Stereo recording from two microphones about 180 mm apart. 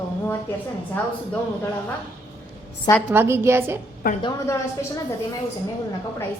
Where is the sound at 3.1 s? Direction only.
15° right (ahead or behind).